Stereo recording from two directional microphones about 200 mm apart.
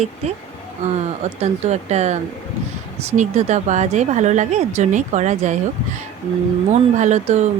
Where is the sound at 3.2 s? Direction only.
35° right (ahead or behind).